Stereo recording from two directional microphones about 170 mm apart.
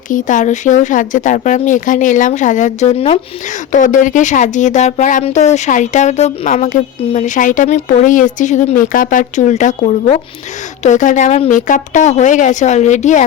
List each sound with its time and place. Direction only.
0.1 s speech: 50° left (ahead or behind)
3.7 s speech: 45° left (ahead or behind)